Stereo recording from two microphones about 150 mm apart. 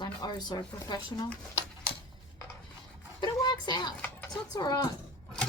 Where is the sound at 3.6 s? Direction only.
30° left (ahead or behind).